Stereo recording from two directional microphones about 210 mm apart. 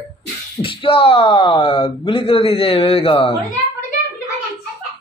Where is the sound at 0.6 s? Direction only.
25° left (ahead or behind).